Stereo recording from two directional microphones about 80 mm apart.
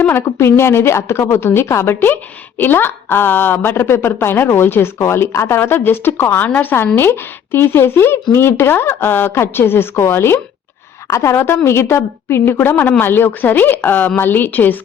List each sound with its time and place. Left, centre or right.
0.0 s a woman's voice: left